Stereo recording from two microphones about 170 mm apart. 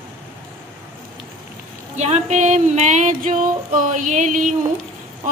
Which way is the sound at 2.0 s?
40° right (ahead or behind).